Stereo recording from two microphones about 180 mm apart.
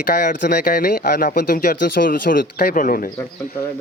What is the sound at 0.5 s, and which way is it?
Speech, 55° left (ahead or behind).